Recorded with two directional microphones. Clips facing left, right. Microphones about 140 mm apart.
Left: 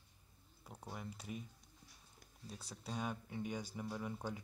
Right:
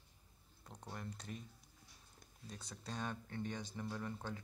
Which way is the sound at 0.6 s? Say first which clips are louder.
Even; 5° left (ahead or behind).